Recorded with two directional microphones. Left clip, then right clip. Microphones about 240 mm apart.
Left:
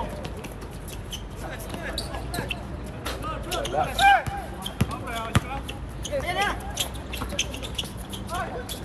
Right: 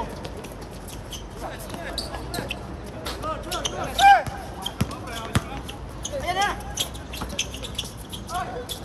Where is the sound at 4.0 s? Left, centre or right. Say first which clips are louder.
Right 4 dB; right.